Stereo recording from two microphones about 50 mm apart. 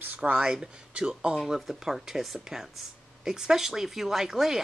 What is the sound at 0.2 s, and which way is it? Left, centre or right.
Speech, centre.